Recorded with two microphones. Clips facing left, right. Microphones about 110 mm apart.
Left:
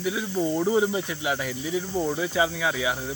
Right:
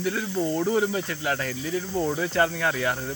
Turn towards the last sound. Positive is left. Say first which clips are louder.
# right 1 dB
turn(degrees=5)  # may be behind; listen again after turning